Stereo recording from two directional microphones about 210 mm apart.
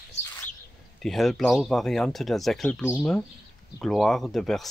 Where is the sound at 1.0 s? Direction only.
Centre (ahead or behind).